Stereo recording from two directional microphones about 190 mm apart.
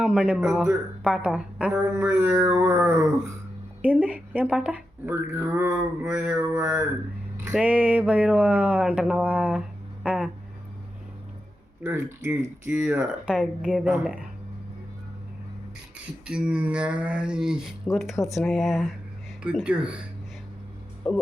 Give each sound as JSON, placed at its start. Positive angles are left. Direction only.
{"t": 0.0, "sound": "a woman's voice", "side_deg": -5}
{"t": 12.2, "sound": "speech", "side_deg": -10}
{"t": 16.2, "sound": "a woman's voice", "side_deg": -5}
{"t": 21.0, "sound": "music", "side_deg": 5}